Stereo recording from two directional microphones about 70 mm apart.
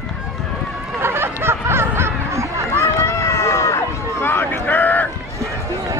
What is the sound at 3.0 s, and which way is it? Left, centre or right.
Run, left.